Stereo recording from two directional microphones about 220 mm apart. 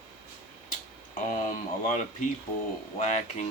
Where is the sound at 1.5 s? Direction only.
35° left (ahead or behind).